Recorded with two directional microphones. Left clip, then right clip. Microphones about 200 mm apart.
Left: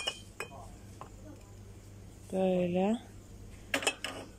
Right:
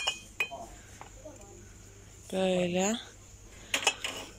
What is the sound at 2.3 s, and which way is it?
Speech, 10° left (ahead or behind).